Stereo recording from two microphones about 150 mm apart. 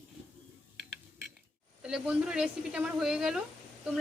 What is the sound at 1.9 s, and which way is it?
Speech, 5° right (ahead or behind).